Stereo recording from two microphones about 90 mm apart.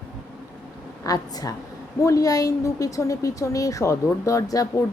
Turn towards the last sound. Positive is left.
turn(degrees=40)  # may be behind; listen again after turning